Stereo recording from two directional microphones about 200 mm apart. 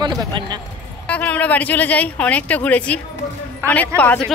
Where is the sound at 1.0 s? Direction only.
5° left (ahead or behind).